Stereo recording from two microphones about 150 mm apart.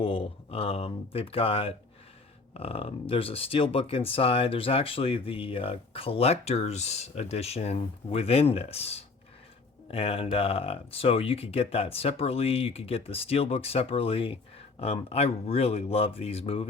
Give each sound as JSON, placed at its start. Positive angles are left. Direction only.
{"t": 0.0, "sound": "speech", "side_deg": 40}